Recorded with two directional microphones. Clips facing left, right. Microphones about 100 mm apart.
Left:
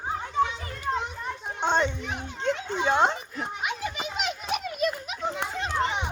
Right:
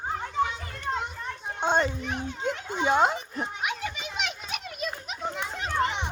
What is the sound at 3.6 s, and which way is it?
Children playing, centre (ahead or behind).